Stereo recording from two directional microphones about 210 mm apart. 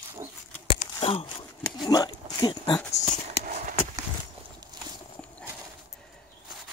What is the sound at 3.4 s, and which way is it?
Clip-clop, 40° right (ahead or behind).